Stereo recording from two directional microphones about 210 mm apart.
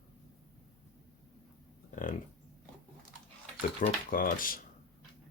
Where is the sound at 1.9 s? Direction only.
40° left (ahead or behind).